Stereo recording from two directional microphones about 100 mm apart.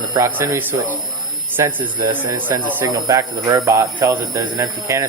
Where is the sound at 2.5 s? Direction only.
30° right (ahead or behind).